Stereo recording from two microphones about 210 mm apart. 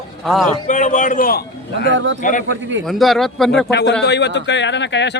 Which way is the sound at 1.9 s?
60° right (ahead or behind).